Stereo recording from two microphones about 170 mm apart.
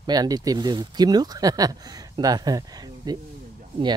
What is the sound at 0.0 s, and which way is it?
Speech, 20° right (ahead or behind).